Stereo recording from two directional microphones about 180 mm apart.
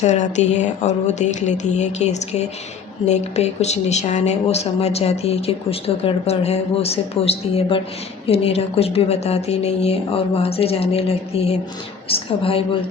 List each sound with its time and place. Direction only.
0.0 s speech: 40° left (ahead or behind)